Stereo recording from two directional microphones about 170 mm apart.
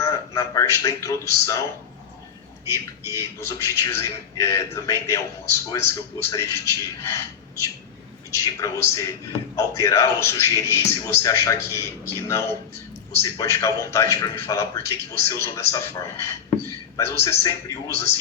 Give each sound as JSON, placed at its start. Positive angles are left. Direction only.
{"t": 0.0, "sound": "a man's voice", "side_deg": 20}
{"t": 3.1, "sound": "a man's voice", "side_deg": 15}
{"t": 8.3, "sound": "a man's voice", "side_deg": 20}